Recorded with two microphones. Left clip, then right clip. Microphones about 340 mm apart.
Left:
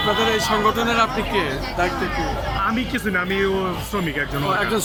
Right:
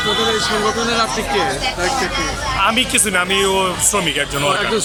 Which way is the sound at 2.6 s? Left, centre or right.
Centre.